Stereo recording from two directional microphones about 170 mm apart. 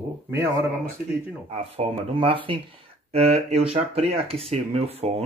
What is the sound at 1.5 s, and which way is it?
Speech, 35° right (ahead or behind).